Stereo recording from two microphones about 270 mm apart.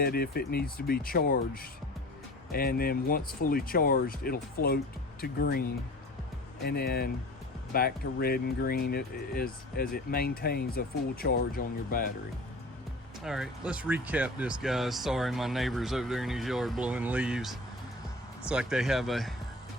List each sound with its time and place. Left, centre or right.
0.0 s speech: left
13.2 s speech: centre